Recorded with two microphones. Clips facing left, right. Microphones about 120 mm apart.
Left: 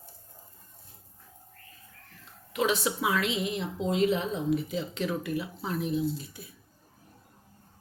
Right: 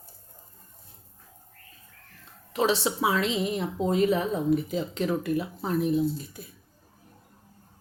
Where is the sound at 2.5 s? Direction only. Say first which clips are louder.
Right 3 dB; 35° right (ahead or behind).